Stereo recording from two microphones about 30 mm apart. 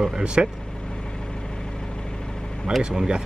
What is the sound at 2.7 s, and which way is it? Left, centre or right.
Speech, right.